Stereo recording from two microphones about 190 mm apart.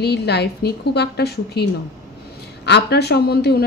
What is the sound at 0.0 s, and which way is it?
A woman's voice, 60° left (ahead or behind).